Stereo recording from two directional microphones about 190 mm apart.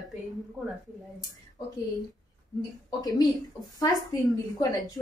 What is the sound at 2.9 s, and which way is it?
Speech, 20° left (ahead or behind).